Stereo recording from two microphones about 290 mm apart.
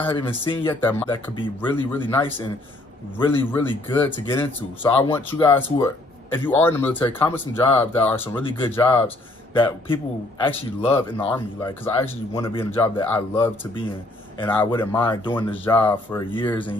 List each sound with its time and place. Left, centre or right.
0.3 s a man's voice: centre
11.1 s speech: centre